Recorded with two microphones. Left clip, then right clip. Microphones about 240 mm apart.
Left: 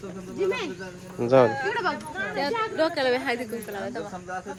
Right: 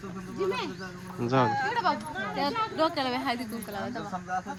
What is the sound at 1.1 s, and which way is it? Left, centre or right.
Speech, centre.